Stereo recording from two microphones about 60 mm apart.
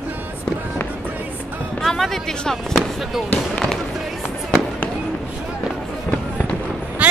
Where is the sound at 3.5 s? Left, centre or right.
Centre.